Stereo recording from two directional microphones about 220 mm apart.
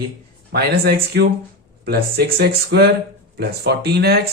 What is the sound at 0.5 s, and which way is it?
Speech, 45° right (ahead or behind).